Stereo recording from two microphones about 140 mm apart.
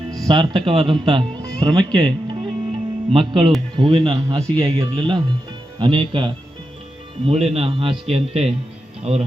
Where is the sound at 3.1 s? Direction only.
35° right (ahead or behind).